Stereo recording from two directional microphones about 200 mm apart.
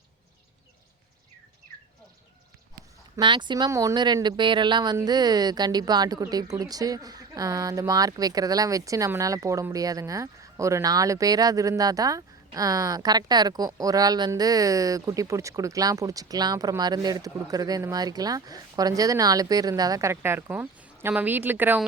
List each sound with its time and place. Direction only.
3.2 s speech: 25° right (ahead or behind)